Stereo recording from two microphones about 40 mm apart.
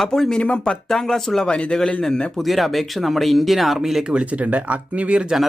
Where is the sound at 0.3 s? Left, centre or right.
Left.